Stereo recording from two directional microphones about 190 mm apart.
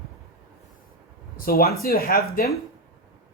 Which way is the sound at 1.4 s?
50° left (ahead or behind).